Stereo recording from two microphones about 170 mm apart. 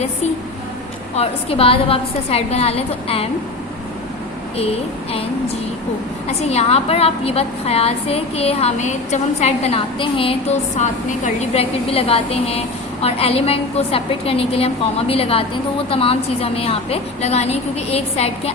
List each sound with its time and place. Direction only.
1.1 s a woman's voice: 35° left (ahead or behind)
4.5 s a woman's voice: 35° left (ahead or behind)
6.2 s a woman's voice: 40° left (ahead or behind)